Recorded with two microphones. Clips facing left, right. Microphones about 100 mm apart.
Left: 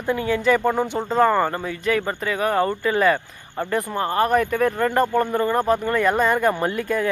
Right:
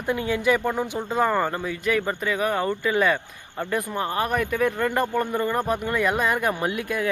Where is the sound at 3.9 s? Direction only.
45° left (ahead or behind).